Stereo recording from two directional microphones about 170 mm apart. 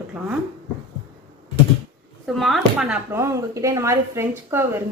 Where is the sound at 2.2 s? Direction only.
Centre (ahead or behind).